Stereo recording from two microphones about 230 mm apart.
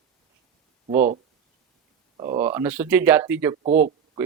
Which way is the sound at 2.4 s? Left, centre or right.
Centre.